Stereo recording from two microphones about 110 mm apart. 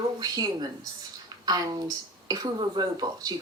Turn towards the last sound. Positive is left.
turn(degrees=-40)  # may be behind; listen again after turning